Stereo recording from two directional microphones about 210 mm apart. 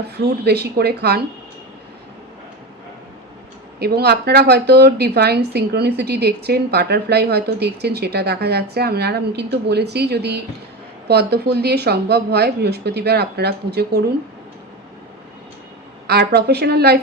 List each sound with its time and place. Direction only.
0.4 s speech: 50° right (ahead or behind)
3.8 s speech: 50° right (ahead or behind)
16.0 s speech: 50° right (ahead or behind)